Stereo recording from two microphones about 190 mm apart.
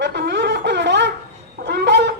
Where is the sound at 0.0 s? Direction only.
65° right (ahead or behind).